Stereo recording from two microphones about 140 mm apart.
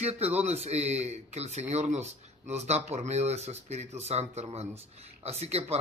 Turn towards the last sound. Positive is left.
turn(degrees=-50)  # may be behind; listen again after turning